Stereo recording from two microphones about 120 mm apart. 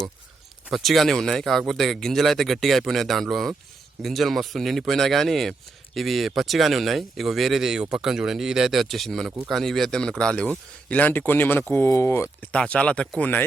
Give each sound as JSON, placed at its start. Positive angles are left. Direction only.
{"t": 0.7, "sound": "speech", "side_deg": 0}
{"t": 12.5, "sound": "speech", "side_deg": 10}